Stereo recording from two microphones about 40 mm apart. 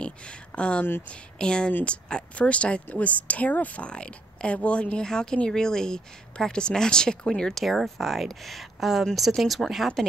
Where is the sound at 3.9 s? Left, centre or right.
Left.